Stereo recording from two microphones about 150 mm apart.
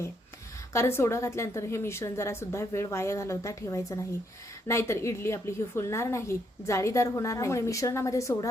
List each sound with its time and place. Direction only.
0.7 s a woman's voice: 15° left (ahead or behind)